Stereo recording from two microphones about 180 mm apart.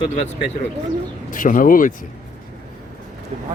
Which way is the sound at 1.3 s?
50° left (ahead or behind).